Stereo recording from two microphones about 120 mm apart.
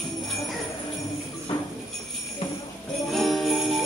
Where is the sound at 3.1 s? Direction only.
Centre (ahead or behind).